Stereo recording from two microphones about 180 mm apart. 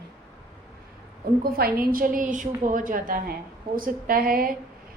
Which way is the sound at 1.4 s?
55° right (ahead or behind).